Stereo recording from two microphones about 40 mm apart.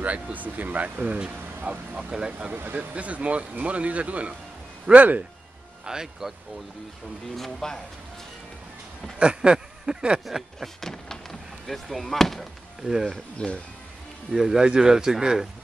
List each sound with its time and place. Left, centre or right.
0.0 s speech: right
2.0 s speech: centre
2.5 s speech: right
5.9 s speech: centre
7.3 s speech: centre
9.2 s speech: right
10.6 s speech: centre
12.8 s speech: centre
13.4 s speech: left
14.3 s speech: centre